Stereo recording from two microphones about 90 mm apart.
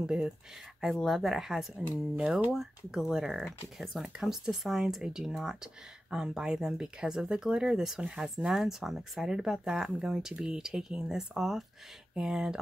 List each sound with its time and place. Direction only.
0.0 s speech: 10° right (ahead or behind)